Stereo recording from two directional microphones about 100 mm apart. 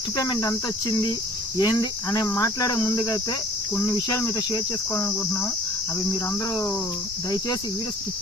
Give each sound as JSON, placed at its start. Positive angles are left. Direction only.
{"t": 0.2, "sound": "cricket", "side_deg": 35}
{"t": 4.4, "sound": "cricket", "side_deg": 35}
{"t": 5.0, "sound": "cricket", "side_deg": 25}